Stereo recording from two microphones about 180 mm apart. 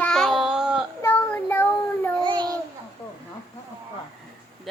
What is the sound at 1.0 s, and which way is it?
Child singing, 10° left (ahead or behind).